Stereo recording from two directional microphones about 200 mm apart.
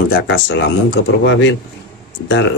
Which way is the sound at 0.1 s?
60° left (ahead or behind).